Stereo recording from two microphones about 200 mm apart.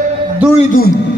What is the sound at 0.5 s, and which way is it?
Speech, 45° left (ahead or behind).